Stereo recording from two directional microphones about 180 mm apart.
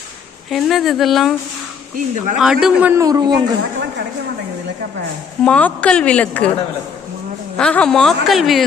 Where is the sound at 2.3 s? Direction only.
Centre (ahead or behind); by 3.3 s 20° right (ahead or behind).